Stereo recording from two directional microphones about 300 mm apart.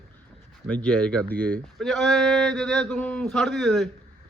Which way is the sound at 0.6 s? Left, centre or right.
Centre.